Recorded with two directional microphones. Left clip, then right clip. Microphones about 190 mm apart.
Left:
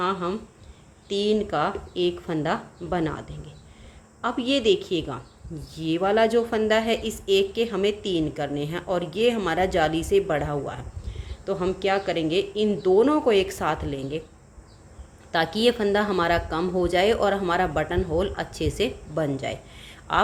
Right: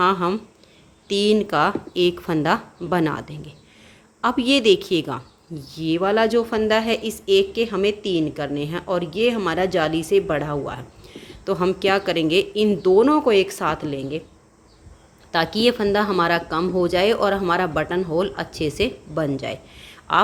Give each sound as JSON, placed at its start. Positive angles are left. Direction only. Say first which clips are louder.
{"t": 0.0, "sound": "a woman's voice", "louder": "right 7 dB", "side_deg": -30}
{"t": 15.3, "sound": "a woman's voice", "louder": "right 3 dB", "side_deg": -15}